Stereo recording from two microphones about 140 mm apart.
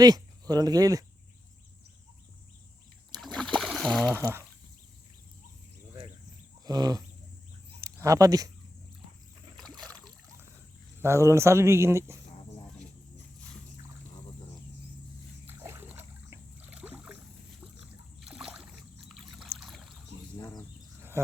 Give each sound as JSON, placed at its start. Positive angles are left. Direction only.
{"t": 0.0, "sound": "speech", "side_deg": -30}
{"t": 3.2, "sound": "splash", "side_deg": 0}
{"t": 6.7, "sound": "speech", "side_deg": -25}
{"t": 9.8, "sound": "boat", "side_deg": 5}
{"t": 11.0, "sound": "speech", "side_deg": -20}
{"t": 15.4, "sound": "splash", "side_deg": -15}
{"t": 16.8, "sound": "boat", "side_deg": -10}
{"t": 18.2, "sound": "a sound", "side_deg": -5}
{"t": 19.5, "sound": "boat", "side_deg": 0}
{"t": 20.4, "sound": "bird", "side_deg": 25}